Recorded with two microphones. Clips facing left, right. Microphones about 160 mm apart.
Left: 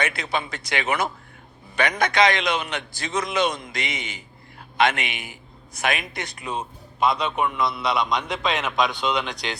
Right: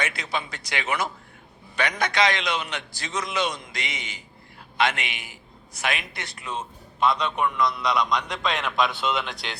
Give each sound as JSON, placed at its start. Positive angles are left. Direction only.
{"t": 0.0, "sound": "a man's voice", "side_deg": 55}
{"t": 6.1, "sound": "a man's voice", "side_deg": 15}